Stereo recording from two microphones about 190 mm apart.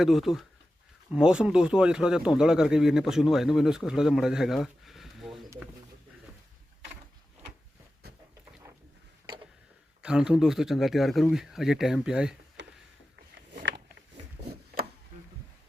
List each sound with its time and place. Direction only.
0.0 s speech: centre (ahead or behind)
10.0 s speech: 5° right (ahead or behind)
12.6 s a sound: 65° right (ahead or behind)